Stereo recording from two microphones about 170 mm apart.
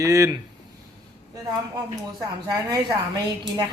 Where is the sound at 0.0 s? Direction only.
20° right (ahead or behind).